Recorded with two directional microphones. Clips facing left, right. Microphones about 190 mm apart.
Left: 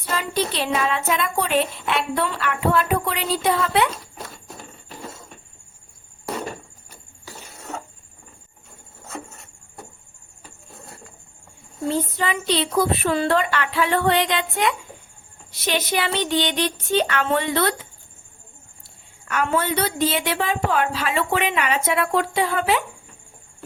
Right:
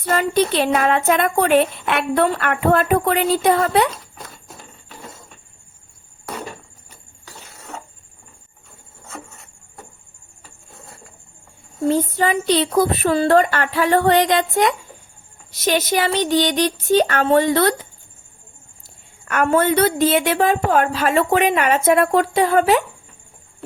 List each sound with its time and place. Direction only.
0.0 s speech: 55° right (ahead or behind)
11.9 s a woman's voice: 45° right (ahead or behind)
19.3 s speech: 50° right (ahead or behind)